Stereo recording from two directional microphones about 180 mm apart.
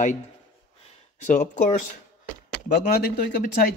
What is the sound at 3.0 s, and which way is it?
Speech, 65° left (ahead or behind).